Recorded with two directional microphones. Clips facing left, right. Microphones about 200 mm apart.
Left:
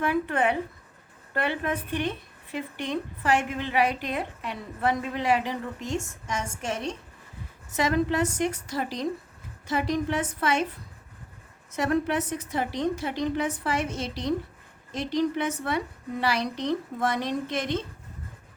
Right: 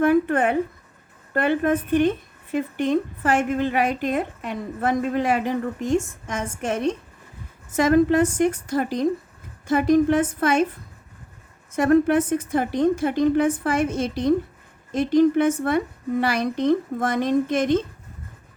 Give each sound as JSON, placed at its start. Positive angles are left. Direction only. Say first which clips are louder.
{"t": 0.0, "sound": "a woman's voice", "louder": "right 7 dB", "side_deg": -50}
{"t": 11.7, "sound": "a woman's voice", "louder": "right 8 dB", "side_deg": -50}